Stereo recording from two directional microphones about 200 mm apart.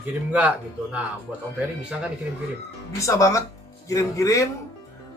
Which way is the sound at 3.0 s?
15° left (ahead or behind).